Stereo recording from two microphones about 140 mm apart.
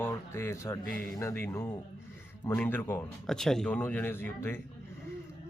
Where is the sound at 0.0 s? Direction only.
20° left (ahead or behind).